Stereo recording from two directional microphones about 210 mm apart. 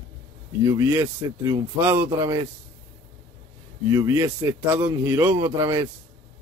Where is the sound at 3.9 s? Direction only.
15° right (ahead or behind).